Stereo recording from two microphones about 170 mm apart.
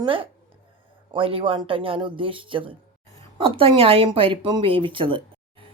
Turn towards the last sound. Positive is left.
turn(degrees=-30)  # may be behind; listen again after turning